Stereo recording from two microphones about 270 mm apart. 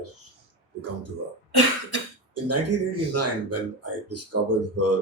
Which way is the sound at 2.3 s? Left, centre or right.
Right.